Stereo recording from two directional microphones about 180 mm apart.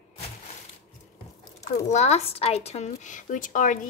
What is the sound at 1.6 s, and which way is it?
Speech, 40° left (ahead or behind).